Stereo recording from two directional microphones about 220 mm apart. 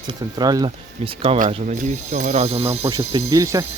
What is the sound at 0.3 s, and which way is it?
Speech, 20° right (ahead or behind).